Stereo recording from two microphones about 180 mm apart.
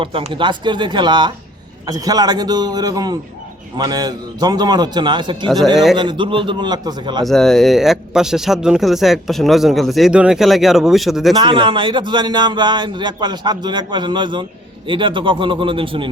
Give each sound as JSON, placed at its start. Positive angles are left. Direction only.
{"t": 0.0, "sound": "a man's voice", "side_deg": -30}
{"t": 5.7, "sound": "speech", "side_deg": 0}
{"t": 6.0, "sound": "a man's voice", "side_deg": -25}
{"t": 7.3, "sound": "speech", "side_deg": 0}
{"t": 11.3, "sound": "a man's voice", "side_deg": -25}